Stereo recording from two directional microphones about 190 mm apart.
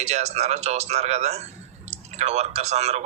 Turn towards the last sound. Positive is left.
turn(degrees=-35)  # may be behind; listen again after turning